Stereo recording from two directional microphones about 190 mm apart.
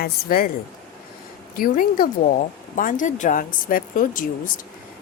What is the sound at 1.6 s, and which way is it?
A woman's voice, 50° left (ahead or behind).